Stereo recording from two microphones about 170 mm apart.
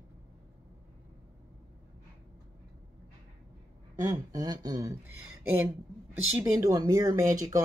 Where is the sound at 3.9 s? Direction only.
20° right (ahead or behind).